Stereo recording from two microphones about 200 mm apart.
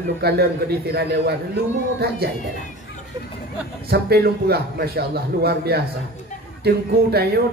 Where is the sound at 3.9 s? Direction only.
50° right (ahead or behind).